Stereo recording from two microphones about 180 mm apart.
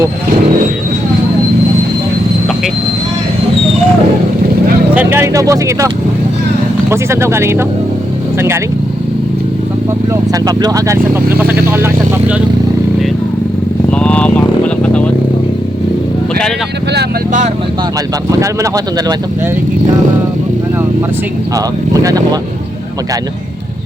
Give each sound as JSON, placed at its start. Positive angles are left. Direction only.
{"t": 4.9, "sound": "speech", "side_deg": -15}
{"t": 6.9, "sound": "speech", "side_deg": -15}
{"t": 10.1, "sound": "speech", "side_deg": -20}
{"t": 13.9, "sound": "vehicle", "side_deg": 5}
{"t": 18.3, "sound": "speech", "side_deg": -20}
{"t": 22.0, "sound": "speech", "side_deg": -20}